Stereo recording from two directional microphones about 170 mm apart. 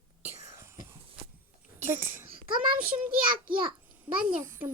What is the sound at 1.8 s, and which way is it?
Speech, 15° right (ahead or behind).